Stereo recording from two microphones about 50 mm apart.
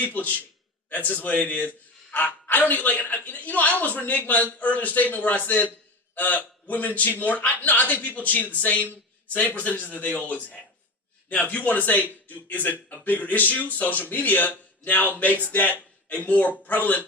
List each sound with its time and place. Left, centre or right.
0.0 s a man's voice: left